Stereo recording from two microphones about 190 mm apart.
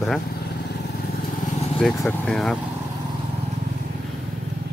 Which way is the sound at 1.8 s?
Centre (ahead or behind).